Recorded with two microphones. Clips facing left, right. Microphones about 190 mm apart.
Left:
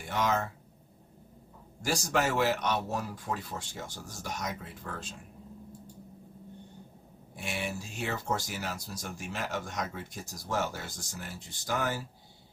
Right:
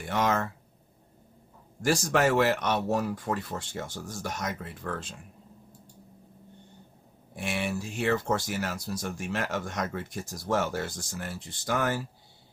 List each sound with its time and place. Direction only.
0.2 s speech: 65° right (ahead or behind)
1.8 s speech: 60° right (ahead or behind)
7.3 s speech: 65° right (ahead or behind)